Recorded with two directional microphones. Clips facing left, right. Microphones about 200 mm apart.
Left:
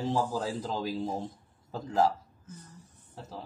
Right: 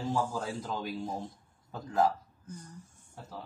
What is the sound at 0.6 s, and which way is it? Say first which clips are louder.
Speech: left 3 dB; 30° left (ahead or behind).